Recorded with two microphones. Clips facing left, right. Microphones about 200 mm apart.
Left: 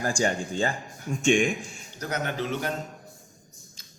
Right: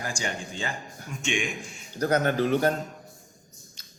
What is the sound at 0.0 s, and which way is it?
Speech, 45° left (ahead or behind).